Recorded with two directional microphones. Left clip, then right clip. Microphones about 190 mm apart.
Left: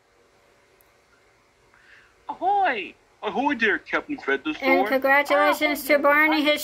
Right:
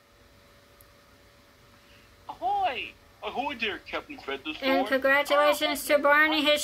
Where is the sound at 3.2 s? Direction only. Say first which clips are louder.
Left 8 dB; 40° left (ahead or behind).